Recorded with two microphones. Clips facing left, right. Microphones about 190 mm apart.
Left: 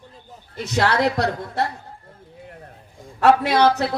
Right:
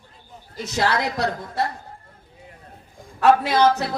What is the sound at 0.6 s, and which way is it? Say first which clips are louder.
A woman's voice: left 3 dB; 60° left (ahead or behind).